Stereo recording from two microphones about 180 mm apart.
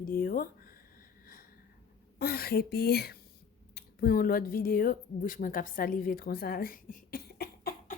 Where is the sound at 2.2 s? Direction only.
55° left (ahead or behind).